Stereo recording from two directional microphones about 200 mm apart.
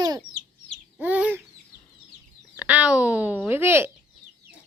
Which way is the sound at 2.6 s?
5° right (ahead or behind).